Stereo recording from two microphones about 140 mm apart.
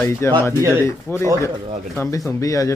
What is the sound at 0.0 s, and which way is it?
Speech, 15° left (ahead or behind).